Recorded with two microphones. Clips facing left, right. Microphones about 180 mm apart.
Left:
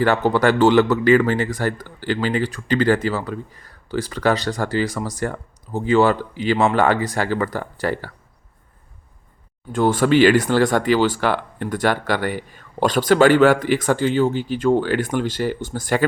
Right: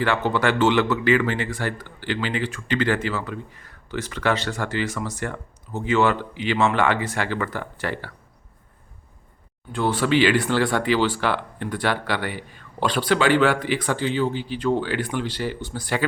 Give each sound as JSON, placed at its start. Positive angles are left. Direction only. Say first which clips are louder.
{"t": 0.0, "sound": "speech", "louder": "left 5 dB", "side_deg": 40}
{"t": 9.7, "sound": "speech", "louder": "left 5 dB", "side_deg": 45}